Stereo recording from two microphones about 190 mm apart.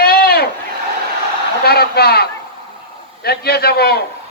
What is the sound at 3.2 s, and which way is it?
Speech, 55° left (ahead or behind).